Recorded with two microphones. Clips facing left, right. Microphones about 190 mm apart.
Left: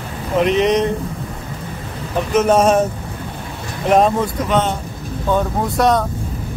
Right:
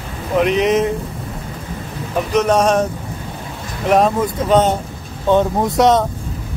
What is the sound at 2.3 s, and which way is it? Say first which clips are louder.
Speech: left 1 dB; 5° left (ahead or behind).